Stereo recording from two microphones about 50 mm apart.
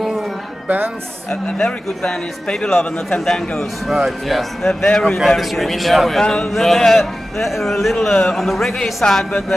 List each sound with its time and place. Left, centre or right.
0.7 s speech: right
1.3 s a man's voice: left
3.8 s speech: centre
4.6 s a man's voice: centre
5.2 s speech: centre
6.2 s speech: centre
6.5 s a man's voice: centre